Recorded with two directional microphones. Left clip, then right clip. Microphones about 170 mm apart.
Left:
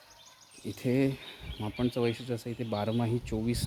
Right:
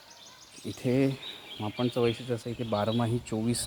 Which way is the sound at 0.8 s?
10° left (ahead or behind).